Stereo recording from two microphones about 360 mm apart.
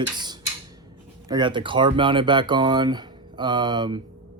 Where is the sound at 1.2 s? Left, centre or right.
Centre.